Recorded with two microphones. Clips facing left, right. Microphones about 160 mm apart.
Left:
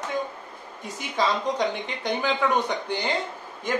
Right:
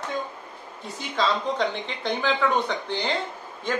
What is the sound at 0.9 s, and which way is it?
Speech, 15° left (ahead or behind).